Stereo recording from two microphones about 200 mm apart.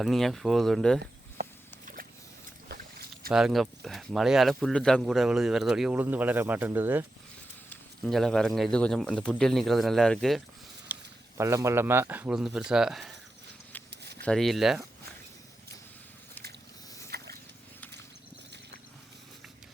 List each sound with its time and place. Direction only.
0.0 s speech: centre (ahead or behind)
1.4 s a sound: 45° right (ahead or behind)
2.7 s boat: 55° right (ahead or behind)
3.2 s speech: centre (ahead or behind)
8.0 s speech: centre (ahead or behind)
10.9 s mechanisms: 10° right (ahead or behind)
11.3 s speech: 15° right (ahead or behind)
13.9 s a sound: 55° right (ahead or behind)
14.2 s speech: 5° left (ahead or behind)
17.1 s a sound: 50° right (ahead or behind)